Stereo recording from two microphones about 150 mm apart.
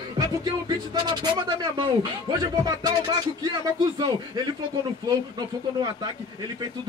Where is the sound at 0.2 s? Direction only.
30° right (ahead or behind).